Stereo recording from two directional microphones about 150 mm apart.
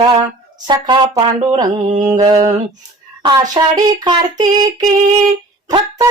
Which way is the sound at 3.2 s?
30° right (ahead or behind).